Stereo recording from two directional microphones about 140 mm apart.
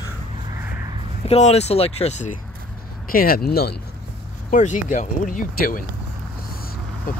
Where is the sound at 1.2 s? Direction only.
45° left (ahead or behind).